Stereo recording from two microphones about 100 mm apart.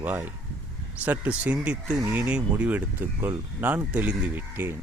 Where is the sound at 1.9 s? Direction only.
25° right (ahead or behind).